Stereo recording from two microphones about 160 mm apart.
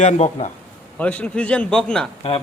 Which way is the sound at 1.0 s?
10° left (ahead or behind).